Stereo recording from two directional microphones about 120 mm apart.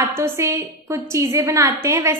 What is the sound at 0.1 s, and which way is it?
A woman's voice, 25° right (ahead or behind).